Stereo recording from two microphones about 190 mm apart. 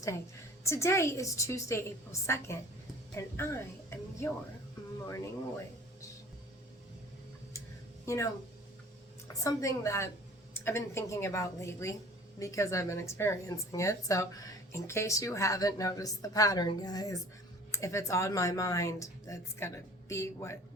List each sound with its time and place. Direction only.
0.6 s speech: 15° left (ahead or behind)
8.0 s speech: 15° left (ahead or behind)